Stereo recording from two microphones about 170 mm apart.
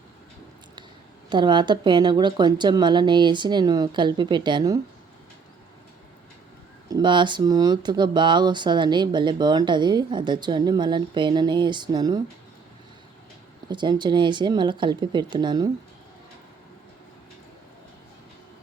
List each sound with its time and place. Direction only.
1.3 s speech: 25° right (ahead or behind)
6.9 s speech: 30° right (ahead or behind)
13.7 s speech: 25° right (ahead or behind)